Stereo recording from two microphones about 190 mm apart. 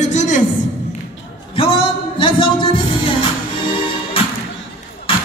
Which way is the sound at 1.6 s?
30° left (ahead or behind).